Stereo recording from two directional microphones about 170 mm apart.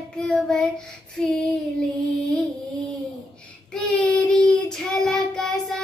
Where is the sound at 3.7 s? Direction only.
5° left (ahead or behind).